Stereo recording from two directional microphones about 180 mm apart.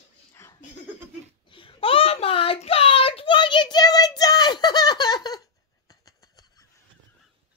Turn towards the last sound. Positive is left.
turn(degrees=20)  # may be behind; listen again after turning